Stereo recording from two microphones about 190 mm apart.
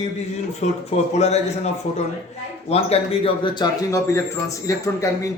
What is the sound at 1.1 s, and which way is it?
Speech, 35° left (ahead or behind).